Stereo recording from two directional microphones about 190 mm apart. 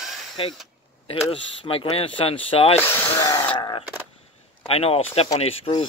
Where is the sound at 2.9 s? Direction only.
15° left (ahead or behind).